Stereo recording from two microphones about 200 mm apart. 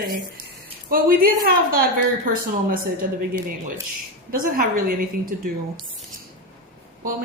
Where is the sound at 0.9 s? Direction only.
45° right (ahead or behind).